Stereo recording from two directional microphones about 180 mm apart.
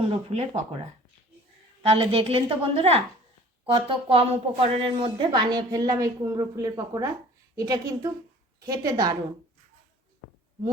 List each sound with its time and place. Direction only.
0.0 s a woman's voice: 35° right (ahead or behind)
1.8 s a woman's voice: 30° right (ahead or behind)